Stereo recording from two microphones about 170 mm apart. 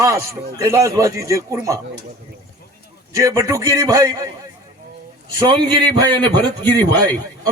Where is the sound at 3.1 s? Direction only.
20° right (ahead or behind).